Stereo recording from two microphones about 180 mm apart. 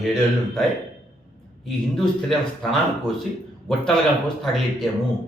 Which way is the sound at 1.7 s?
Centre (ahead or behind).